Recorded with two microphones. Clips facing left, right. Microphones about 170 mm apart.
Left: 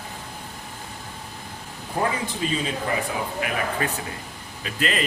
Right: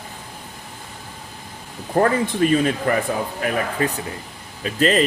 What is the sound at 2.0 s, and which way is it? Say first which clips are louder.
Speech: right 8 dB; 55° right (ahead or behind).